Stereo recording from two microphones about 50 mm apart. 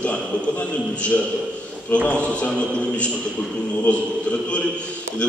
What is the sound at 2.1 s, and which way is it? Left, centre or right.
Speech, left.